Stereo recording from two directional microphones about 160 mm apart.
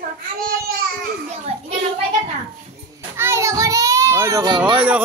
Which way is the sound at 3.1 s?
15° right (ahead or behind).